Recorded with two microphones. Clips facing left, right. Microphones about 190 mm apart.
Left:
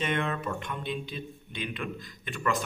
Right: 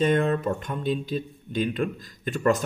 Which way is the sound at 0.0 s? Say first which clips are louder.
Right 8 dB; 40° right (ahead or behind).